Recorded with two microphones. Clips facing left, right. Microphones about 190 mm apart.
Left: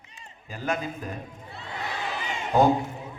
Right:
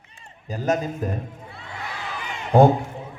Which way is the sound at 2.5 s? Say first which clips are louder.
Right 6 dB; 55° right (ahead or behind).